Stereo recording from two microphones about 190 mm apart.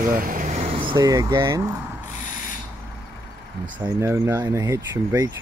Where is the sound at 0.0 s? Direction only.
45° right (ahead or behind); by 1.6 s 15° right (ahead or behind).